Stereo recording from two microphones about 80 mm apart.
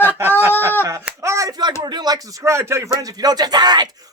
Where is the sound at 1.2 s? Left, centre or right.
Right.